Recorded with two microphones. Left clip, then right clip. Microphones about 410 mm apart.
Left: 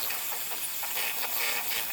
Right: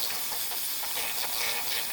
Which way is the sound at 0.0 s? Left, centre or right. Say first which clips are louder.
Right 2 dB; centre.